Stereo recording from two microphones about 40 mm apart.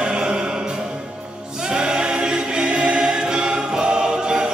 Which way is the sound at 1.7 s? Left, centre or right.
Centre.